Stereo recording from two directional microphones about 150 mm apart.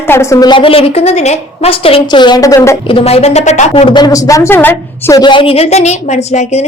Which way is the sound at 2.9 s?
40° left (ahead or behind).